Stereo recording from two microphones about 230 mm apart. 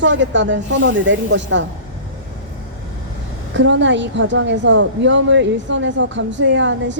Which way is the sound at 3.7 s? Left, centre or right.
Right.